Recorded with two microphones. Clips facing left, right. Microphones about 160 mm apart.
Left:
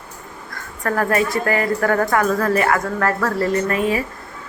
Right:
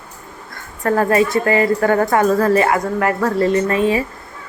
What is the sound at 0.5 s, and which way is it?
A woman's voice, 25° right (ahead or behind).